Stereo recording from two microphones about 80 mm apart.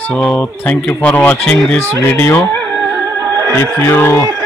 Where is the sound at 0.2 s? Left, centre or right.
Centre.